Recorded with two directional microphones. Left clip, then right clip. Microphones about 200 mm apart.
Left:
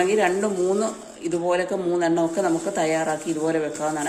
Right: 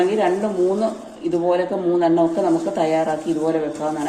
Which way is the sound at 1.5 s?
30° left (ahead or behind).